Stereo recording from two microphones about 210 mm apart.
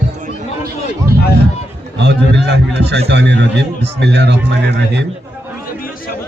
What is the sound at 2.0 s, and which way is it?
A man's voice, 55° right (ahead or behind).